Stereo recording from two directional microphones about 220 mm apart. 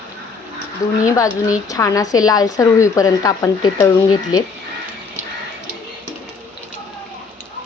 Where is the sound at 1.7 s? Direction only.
15° left (ahead or behind).